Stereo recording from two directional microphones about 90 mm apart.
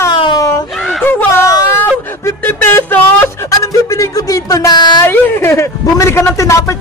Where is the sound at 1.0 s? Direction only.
25° left (ahead or behind).